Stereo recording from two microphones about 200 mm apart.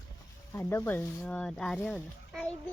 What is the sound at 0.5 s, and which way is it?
Speech, 10° left (ahead or behind).